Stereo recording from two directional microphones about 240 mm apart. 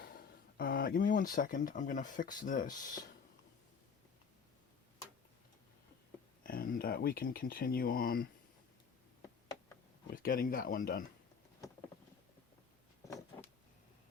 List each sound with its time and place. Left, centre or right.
0.5 s speech: left
6.4 s speech: left
10.1 s speech: left